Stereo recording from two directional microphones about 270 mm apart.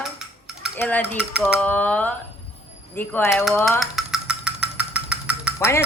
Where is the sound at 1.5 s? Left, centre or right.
Centre.